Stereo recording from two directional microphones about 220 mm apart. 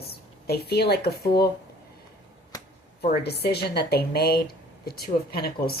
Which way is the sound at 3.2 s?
45° left (ahead or behind).